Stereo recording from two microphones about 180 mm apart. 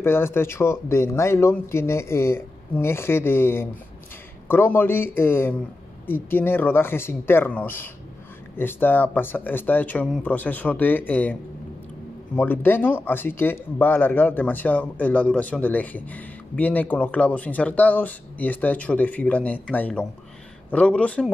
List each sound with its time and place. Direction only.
0.0 s speech: 15° left (ahead or behind)
12.4 s speech: 10° left (ahead or behind)